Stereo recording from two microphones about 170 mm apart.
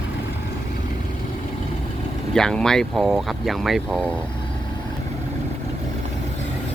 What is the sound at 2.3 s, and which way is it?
Speech, 5° left (ahead or behind).